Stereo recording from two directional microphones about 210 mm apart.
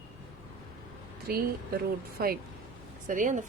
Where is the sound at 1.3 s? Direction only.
45° right (ahead or behind).